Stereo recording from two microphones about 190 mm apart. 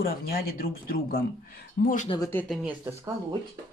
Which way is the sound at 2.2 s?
10° left (ahead or behind).